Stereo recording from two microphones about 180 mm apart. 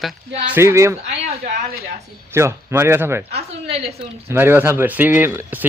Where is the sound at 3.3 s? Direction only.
35° right (ahead or behind).